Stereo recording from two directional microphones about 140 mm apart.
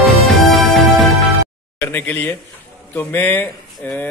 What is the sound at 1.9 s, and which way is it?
A man's voice, 15° left (ahead or behind).